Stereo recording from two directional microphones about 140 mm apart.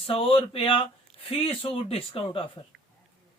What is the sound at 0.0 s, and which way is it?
A man's voice, 40° left (ahead or behind).